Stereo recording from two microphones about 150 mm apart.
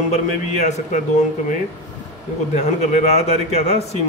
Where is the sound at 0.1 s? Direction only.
50° left (ahead or behind).